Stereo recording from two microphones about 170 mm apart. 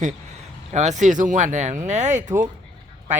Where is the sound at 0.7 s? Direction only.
45° right (ahead or behind).